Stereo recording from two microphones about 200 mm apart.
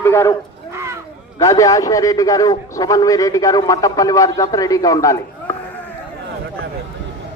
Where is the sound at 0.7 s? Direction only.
15° right (ahead or behind).